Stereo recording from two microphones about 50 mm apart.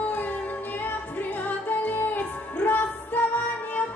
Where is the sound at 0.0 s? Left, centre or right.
Left.